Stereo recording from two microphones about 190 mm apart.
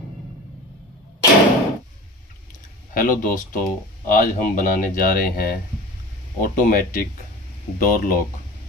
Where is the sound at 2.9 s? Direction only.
45° left (ahead or behind).